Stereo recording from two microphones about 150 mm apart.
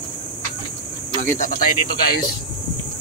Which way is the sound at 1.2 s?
60° left (ahead or behind).